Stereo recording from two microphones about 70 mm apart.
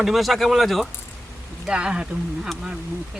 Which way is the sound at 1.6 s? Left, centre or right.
Centre.